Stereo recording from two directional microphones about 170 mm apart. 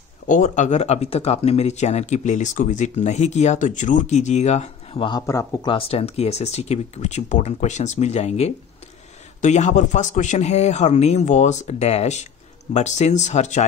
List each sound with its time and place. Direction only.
0.3 s speech: 50° left (ahead or behind); by 5.2 s 30° left (ahead or behind)
5.2 s speech: 20° left (ahead or behind)
5.7 s speech: 35° left (ahead or behind)